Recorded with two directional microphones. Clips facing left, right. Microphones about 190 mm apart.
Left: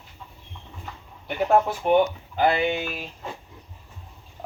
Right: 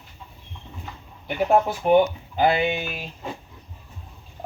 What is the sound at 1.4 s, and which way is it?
Speech, 10° right (ahead or behind).